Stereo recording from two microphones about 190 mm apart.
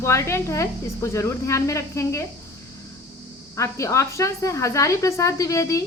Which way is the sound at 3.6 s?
15° left (ahead or behind).